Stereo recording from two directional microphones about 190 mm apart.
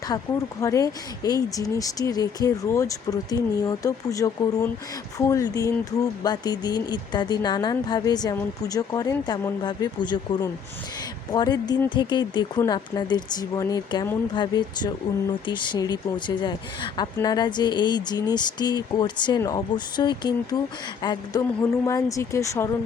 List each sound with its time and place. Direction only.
0.1 s a woman's voice: 20° left (ahead or behind)